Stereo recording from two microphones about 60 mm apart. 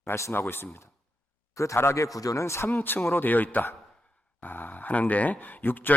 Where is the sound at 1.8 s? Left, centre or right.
Left.